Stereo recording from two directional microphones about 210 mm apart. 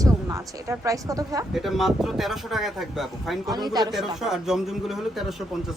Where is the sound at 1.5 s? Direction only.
Centre (ahead or behind).